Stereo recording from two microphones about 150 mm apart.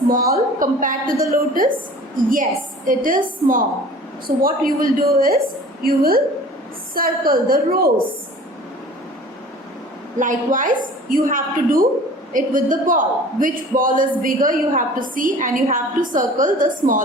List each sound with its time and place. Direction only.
0.1 s a woman's voice: 75° right (ahead or behind)
0.6 s a man's voice: 65° right (ahead or behind)
10.2 s a man's voice: 60° right (ahead or behind)